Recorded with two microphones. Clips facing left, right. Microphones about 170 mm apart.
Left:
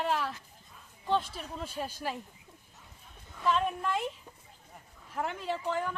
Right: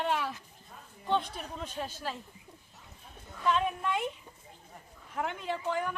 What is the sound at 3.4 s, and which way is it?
Speech, centre (ahead or behind).